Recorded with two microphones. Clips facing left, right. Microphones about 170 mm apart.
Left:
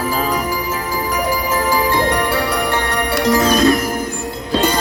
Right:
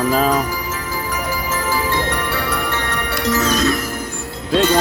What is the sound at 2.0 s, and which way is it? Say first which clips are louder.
Music: left 5 dB; 35° left (ahead or behind).